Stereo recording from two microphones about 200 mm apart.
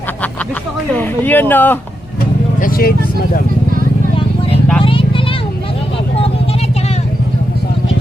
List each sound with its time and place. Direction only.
0.9 s speech: 10° left (ahead or behind)
2.6 s speech: 45° left (ahead or behind)
4.8 s vehicle: 25° left (ahead or behind)